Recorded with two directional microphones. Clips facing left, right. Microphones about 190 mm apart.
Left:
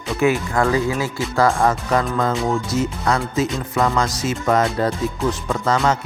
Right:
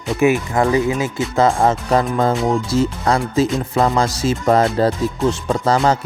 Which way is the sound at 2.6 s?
30° right (ahead or behind).